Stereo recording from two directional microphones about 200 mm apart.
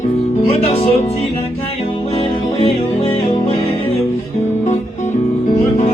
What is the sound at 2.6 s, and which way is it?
Music, 30° left (ahead or behind).